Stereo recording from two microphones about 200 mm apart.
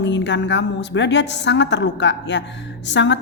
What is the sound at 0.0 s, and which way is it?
A woman's voice, 65° left (ahead or behind).